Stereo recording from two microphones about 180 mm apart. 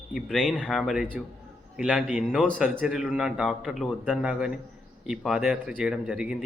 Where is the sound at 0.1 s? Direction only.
5° right (ahead or behind).